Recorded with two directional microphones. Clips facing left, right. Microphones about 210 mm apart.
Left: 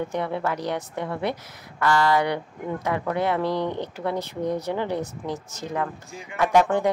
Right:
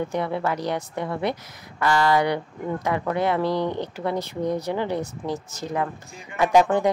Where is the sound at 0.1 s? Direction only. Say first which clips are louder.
Right 1 dB; 10° right (ahead or behind).